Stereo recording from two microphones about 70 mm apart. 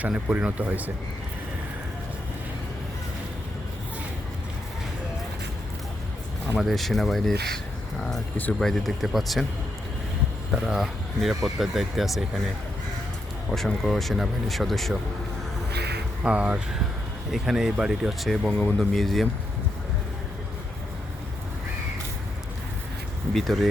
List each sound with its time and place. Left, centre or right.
0.1 s speech: centre
6.6 s speech: centre
8.5 s speech: centre
10.5 s speech: centre
13.5 s speech: centre
16.2 s speech: centre
17.3 s speech: centre
18.5 s speech: centre
18.9 s speech: centre
23.3 s speech: centre